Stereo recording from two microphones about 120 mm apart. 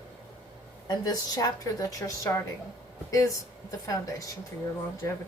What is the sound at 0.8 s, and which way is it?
A woman's voice, 35° left (ahead or behind).